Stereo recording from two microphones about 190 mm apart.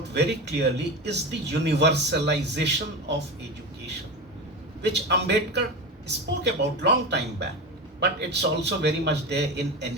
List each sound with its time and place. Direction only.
0.1 s a man's voice: 65° right (ahead or behind)
4.8 s a man's voice: 65° right (ahead or behind)